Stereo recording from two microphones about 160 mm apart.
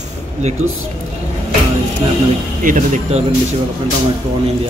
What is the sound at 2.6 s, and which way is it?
Speech, 50° right (ahead or behind).